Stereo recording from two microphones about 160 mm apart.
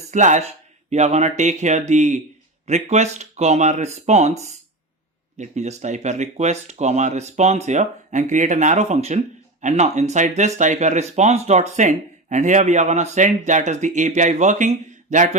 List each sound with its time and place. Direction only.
0.1 s speech: 50° right (ahead or behind)